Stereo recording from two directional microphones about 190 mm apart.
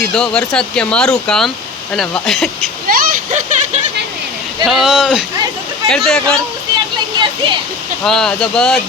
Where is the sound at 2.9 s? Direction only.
45° right (ahead or behind).